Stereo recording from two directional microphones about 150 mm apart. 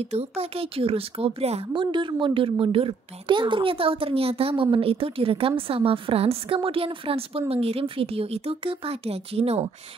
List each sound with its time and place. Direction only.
0.0 s a woman's voice: 45° right (ahead or behind)